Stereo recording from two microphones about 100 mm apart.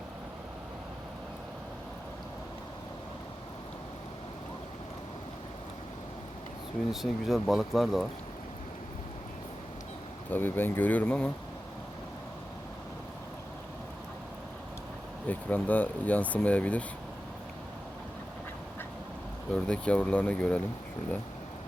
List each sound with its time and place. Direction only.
6.9 s speech: centre (ahead or behind)
10.3 s speech: 20° left (ahead or behind)
15.3 s speech: 15° left (ahead or behind)
19.5 s speech: 10° left (ahead or behind)